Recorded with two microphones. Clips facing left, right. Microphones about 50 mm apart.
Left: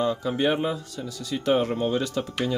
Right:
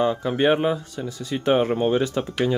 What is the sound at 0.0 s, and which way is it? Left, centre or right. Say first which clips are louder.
Speech: right 4 dB; right.